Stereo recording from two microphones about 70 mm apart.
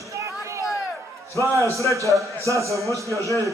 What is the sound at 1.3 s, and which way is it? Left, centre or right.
A man's voice, right.